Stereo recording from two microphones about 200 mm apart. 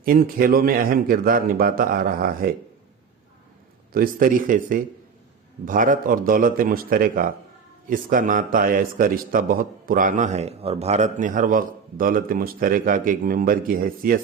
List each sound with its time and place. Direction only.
0.0 s a man's voice: 45° right (ahead or behind)
3.9 s a man's voice: 45° right (ahead or behind)